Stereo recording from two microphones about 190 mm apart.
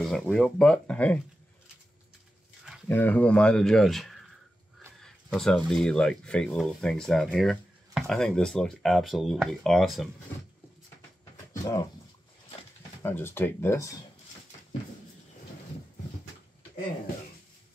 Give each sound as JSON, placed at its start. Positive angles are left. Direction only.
{"t": 0.0, "sound": "speech", "side_deg": 0}
{"t": 2.9, "sound": "speech", "side_deg": 10}
{"t": 11.6, "sound": "speech", "side_deg": 20}
{"t": 13.0, "sound": "speech", "side_deg": 10}